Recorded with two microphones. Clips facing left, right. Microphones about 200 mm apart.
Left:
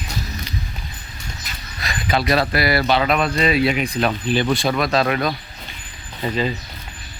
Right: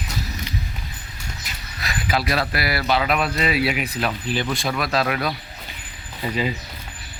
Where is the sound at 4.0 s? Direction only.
25° left (ahead or behind).